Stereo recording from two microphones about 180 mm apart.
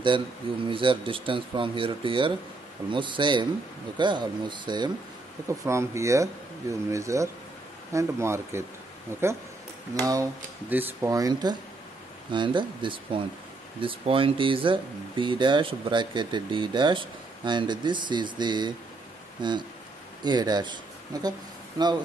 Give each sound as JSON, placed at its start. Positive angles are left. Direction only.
{"t": 0.7, "sound": "speech", "side_deg": -30}